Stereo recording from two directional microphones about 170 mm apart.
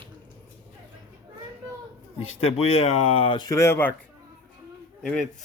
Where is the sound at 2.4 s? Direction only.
35° left (ahead or behind); by 3.9 s 15° left (ahead or behind).